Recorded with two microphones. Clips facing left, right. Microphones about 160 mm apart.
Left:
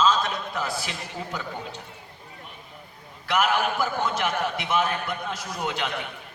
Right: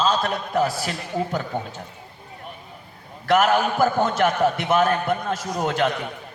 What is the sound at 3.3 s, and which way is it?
A man's voice, 45° right (ahead or behind).